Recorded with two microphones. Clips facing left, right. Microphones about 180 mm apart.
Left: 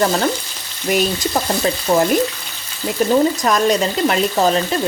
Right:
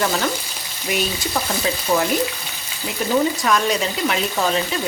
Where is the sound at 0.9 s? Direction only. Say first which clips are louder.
Left 6 dB; 45° left (ahead or behind).